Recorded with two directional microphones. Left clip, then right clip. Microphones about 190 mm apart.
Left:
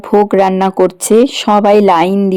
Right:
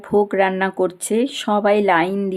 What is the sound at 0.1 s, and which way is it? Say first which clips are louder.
A woman's voice: left 7 dB; 35° left (ahead or behind).